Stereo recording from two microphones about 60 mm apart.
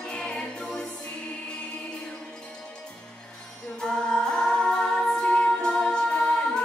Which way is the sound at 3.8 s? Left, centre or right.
Centre.